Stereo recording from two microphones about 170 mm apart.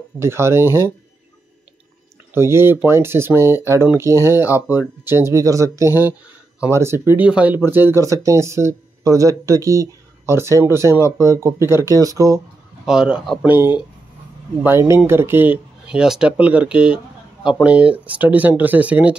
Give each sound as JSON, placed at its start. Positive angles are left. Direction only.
{"t": 0.2, "sound": "speech", "side_deg": -15}
{"t": 2.3, "sound": "speech", "side_deg": -15}
{"t": 12.8, "sound": "speech", "side_deg": -5}